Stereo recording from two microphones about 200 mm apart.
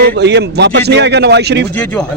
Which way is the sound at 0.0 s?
55° right (ahead or behind).